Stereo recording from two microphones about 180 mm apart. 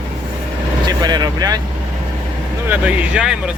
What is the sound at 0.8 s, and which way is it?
Speech, 20° right (ahead or behind).